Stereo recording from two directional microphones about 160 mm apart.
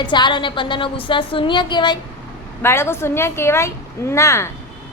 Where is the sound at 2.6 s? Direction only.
15° left (ahead or behind).